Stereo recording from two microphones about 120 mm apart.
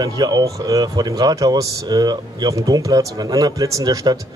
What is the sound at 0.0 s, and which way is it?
Speech, 35° right (ahead or behind).